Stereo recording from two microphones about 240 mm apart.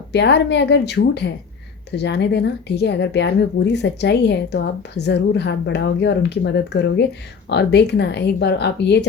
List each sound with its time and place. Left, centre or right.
0.1 s speech: left